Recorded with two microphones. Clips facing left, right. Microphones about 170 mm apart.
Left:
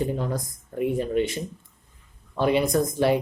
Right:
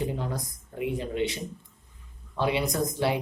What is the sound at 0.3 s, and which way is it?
Speech, 50° left (ahead or behind).